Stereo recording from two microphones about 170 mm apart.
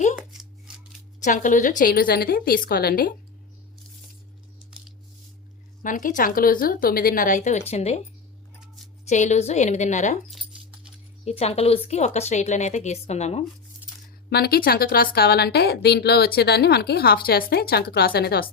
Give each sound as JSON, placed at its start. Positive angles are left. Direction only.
{"t": 1.2, "sound": "a woman's voice", "side_deg": 50}
{"t": 5.8, "sound": "a woman's voice", "side_deg": 50}
{"t": 9.0, "sound": "a woman's voice", "side_deg": 45}
{"t": 11.3, "sound": "a woman's voice", "side_deg": 40}
{"t": 14.3, "sound": "a woman's voice", "side_deg": 70}